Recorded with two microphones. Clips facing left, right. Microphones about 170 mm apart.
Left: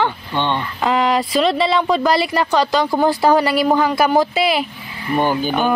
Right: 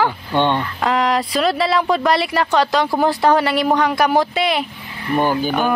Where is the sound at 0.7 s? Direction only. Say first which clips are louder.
Left 5 dB; centre (ahead or behind).